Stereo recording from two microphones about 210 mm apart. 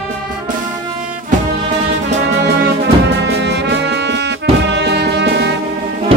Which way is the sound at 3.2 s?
55° right (ahead or behind).